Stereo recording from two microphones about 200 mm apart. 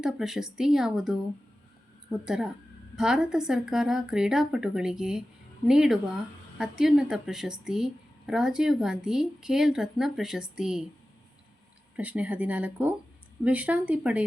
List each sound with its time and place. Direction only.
0.0 s speech: centre (ahead or behind)
2.2 s speech: centre (ahead or behind)
11.9 s speech: 5° right (ahead or behind)